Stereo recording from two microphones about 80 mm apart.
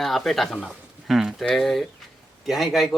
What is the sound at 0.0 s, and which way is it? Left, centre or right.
Speech, centre.